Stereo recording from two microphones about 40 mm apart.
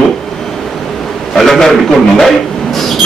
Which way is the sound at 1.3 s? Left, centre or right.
Centre.